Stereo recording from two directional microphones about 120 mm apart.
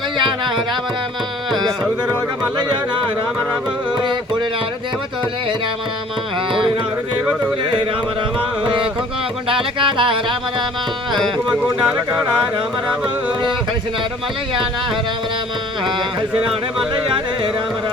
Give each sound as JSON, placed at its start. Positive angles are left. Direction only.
{"t": 4.0, "sound": "carnatic music", "side_deg": -40}
{"t": 6.5, "sound": "music", "side_deg": -45}
{"t": 7.6, "sound": "carnatic music", "side_deg": -40}
{"t": 8.6, "sound": "music", "side_deg": -45}
{"t": 11.9, "sound": "speech", "side_deg": -10}